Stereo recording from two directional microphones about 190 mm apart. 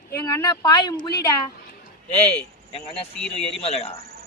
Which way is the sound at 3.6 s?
30° left (ahead or behind).